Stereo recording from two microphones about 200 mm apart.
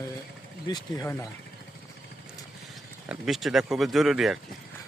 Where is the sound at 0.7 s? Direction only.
15° left (ahead or behind).